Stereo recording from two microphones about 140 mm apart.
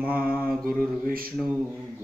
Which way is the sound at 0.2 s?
10° left (ahead or behind).